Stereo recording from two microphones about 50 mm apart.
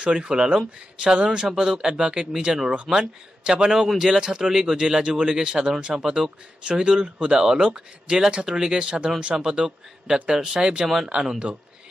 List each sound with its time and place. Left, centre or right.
0.0 s speech: centre